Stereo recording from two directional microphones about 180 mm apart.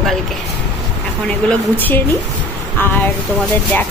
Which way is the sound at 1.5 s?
10° left (ahead or behind).